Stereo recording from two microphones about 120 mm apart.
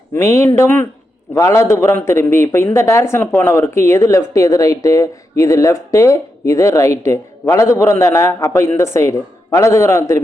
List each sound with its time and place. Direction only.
0.1 s speech: 25° left (ahead or behind)